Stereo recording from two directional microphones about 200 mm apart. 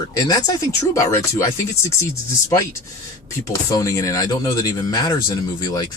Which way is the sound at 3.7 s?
15° left (ahead or behind).